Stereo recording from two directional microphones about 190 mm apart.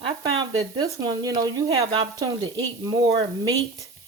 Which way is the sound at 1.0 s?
20° right (ahead or behind).